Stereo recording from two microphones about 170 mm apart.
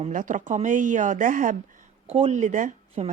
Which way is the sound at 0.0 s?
50° right (ahead or behind).